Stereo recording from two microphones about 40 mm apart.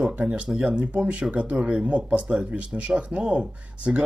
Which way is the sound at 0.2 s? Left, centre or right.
Right.